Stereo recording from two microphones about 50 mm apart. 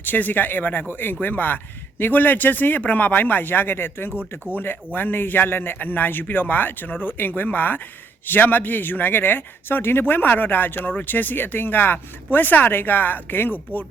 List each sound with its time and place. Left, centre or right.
0.0 s speech: left